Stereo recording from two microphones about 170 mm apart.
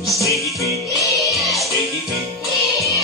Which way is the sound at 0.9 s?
20° left (ahead or behind).